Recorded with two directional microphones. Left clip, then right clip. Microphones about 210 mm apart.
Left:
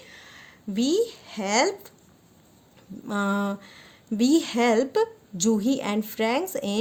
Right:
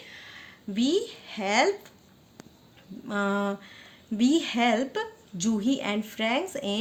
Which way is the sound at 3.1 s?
65° left (ahead or behind).